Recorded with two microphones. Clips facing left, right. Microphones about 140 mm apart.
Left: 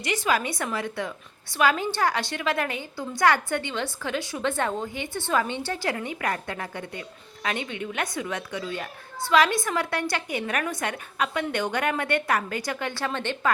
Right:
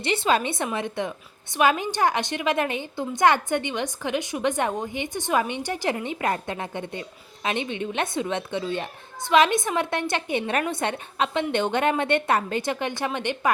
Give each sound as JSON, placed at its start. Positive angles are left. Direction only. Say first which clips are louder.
{"t": 0.0, "sound": "a woman's voice", "louder": "right 3 dB", "side_deg": -25}